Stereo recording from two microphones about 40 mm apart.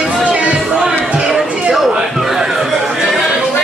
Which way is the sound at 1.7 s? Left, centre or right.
Centre.